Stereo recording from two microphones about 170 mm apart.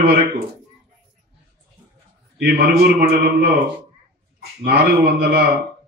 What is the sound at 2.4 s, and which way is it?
A man's voice, 70° right (ahead or behind).